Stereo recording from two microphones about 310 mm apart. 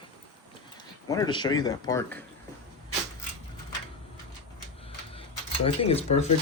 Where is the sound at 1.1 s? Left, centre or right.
Centre.